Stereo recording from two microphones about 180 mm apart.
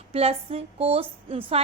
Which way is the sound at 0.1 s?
35° right (ahead or behind).